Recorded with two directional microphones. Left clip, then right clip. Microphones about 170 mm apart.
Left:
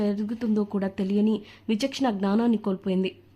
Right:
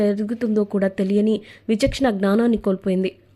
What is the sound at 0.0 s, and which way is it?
Speech, 20° right (ahead or behind).